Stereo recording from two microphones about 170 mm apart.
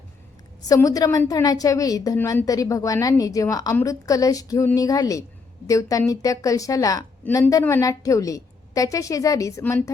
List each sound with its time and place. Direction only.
0.7 s a woman's voice: 20° left (ahead or behind)